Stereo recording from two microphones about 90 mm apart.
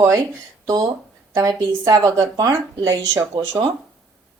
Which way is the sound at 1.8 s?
40° right (ahead or behind).